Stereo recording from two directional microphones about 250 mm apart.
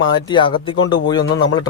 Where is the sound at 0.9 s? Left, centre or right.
Centre.